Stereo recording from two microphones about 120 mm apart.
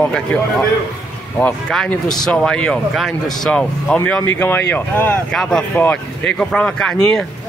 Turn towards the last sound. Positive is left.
turn(degrees=5)  # may be behind; listen again after turning